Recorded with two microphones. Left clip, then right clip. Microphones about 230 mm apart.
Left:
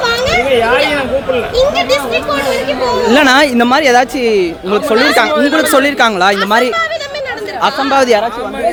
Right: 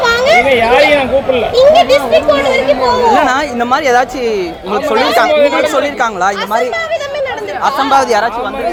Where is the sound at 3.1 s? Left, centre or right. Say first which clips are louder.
Left 3 dB; left.